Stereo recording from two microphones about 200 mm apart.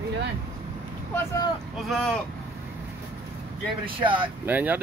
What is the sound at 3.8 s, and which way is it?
Speech, 25° right (ahead or behind).